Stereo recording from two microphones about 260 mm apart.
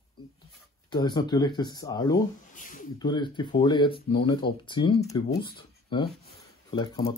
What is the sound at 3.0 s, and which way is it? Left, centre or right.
Speech, centre.